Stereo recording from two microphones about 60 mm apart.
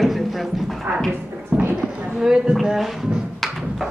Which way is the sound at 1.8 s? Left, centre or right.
Centre.